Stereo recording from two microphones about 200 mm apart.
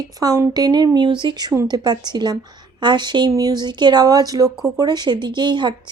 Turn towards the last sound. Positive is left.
turn(degrees=-20)  # may be behind; listen again after turning